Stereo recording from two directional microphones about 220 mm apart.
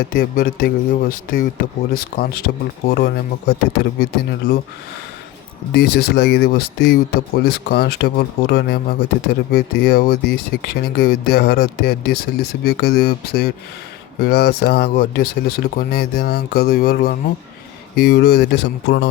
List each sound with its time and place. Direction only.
0.0 s a man's voice: 40° left (ahead or behind)
5.7 s speech: 45° left (ahead or behind)